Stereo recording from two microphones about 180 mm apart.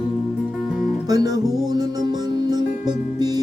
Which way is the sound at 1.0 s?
20° right (ahead or behind).